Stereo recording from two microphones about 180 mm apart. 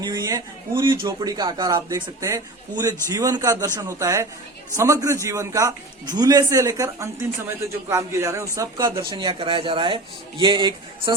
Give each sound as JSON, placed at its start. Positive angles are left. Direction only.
{"t": 0.0, "sound": "a man's voice", "side_deg": -20}
{"t": 9.0, "sound": "speech", "side_deg": -25}